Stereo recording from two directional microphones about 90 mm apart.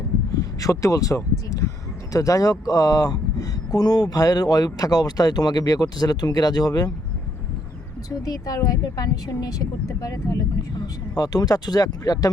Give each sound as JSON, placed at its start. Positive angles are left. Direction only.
{"t": 0.6, "sound": "speech", "side_deg": 35}
{"t": 8.2, "sound": "speech", "side_deg": 45}